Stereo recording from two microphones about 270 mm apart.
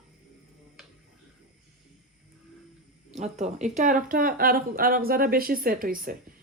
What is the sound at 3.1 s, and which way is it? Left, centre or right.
Speech, right.